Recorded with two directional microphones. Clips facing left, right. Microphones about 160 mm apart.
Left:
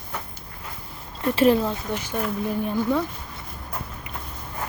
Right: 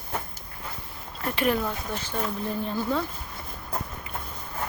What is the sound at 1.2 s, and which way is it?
Speech, 30° left (ahead or behind).